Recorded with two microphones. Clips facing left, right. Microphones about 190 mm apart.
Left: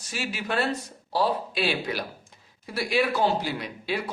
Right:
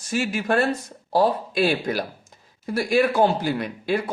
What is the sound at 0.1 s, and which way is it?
Speech, 45° right (ahead or behind).